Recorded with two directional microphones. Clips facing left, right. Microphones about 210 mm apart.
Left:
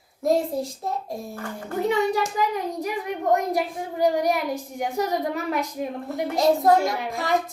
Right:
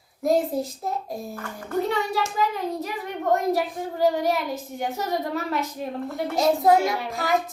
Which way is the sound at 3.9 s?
15° left (ahead or behind).